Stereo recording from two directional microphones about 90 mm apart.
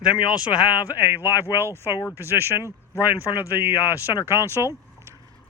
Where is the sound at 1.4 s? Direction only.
30° left (ahead or behind).